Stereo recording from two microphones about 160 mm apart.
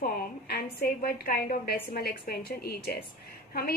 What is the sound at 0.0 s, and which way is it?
A woman's voice, 75° left (ahead or behind).